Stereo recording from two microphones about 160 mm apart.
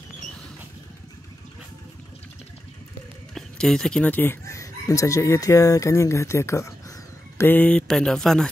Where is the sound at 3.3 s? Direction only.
5° left (ahead or behind).